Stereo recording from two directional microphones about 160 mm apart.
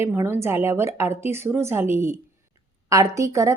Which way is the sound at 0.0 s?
15° right (ahead or behind).